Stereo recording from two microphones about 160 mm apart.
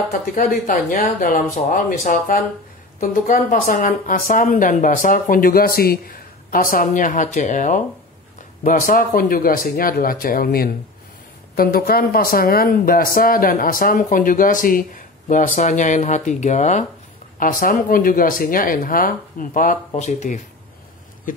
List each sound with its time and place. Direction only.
0.1 s a woman's voice: 60° left (ahead or behind)
17.4 s a woman's voice: 60° left (ahead or behind)
19.9 s speech: 45° left (ahead or behind)
21.3 s a sound: 55° left (ahead or behind)